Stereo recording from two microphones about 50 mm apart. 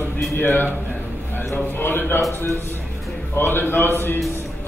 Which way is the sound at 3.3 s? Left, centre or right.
Left.